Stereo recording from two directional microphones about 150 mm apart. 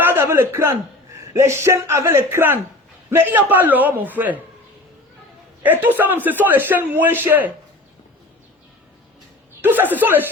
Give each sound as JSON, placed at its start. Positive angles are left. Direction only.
{"t": 0.0, "sound": "a man's voice", "side_deg": -15}
{"t": 5.6, "sound": "a man's voice", "side_deg": -10}
{"t": 9.6, "sound": "a man's voice", "side_deg": -10}